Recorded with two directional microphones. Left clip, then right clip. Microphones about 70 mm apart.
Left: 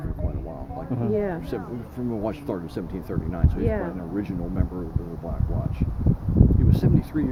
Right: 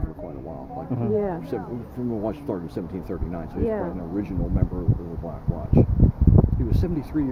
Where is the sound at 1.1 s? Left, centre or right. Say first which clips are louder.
Right 1 dB; left.